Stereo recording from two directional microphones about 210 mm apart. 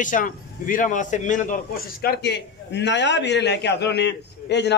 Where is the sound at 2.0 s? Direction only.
50° left (ahead or behind).